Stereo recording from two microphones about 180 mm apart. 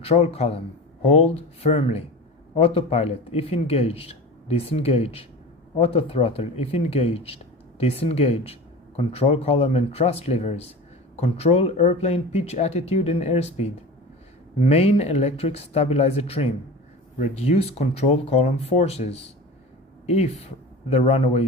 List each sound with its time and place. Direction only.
0.0 s speech: 35° left (ahead or behind)